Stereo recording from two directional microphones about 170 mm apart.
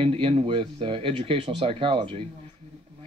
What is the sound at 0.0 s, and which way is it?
Speech, 35° right (ahead or behind).